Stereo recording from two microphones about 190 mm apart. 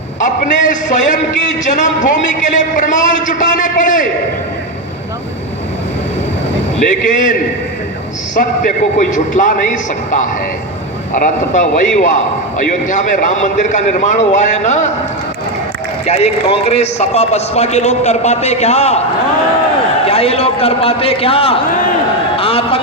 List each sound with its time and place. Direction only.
0.2 s a man's voice: 40° left (ahead or behind)
7.1 s a man's voice: 45° left (ahead or behind)
8.4 s a man's voice: 40° left (ahead or behind)
16.0 s a man's voice: 35° left (ahead or behind)
20.1 s a man's voice: 30° left (ahead or behind)